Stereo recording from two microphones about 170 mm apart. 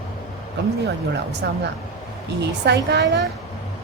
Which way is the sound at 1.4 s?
80° right.